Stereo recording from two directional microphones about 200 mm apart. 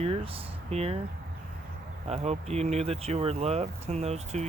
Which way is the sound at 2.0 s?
30° right (ahead or behind).